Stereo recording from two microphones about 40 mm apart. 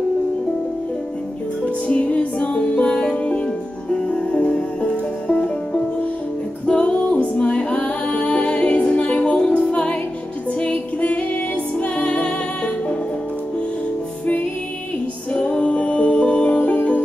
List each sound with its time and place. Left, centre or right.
1.9 s music: left
6.6 s music: left
15.3 s music: left